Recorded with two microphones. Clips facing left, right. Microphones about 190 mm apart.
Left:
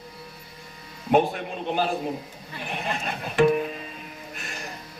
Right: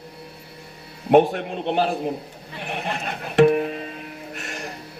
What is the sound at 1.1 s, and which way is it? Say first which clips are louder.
Speech: right 5 dB; 65° right (ahead or behind).